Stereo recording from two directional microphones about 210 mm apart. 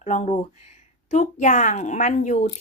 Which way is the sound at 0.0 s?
30° left (ahead or behind).